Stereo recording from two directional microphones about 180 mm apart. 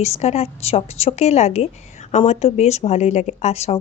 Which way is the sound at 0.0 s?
35° left (ahead or behind).